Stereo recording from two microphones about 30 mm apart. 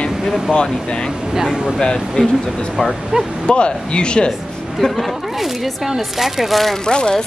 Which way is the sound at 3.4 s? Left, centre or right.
Left.